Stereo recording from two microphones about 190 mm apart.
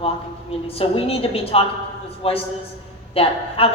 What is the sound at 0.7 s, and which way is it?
A woman's voice, 30° left (ahead or behind).